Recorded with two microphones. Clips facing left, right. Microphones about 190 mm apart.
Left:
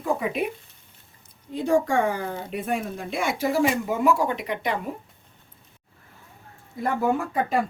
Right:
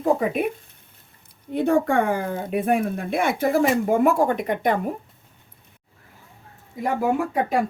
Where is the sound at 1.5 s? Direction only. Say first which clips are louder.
Right 2 dB; 60° right (ahead or behind).